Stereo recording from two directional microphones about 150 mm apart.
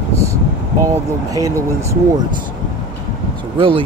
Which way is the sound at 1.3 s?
20° right (ahead or behind).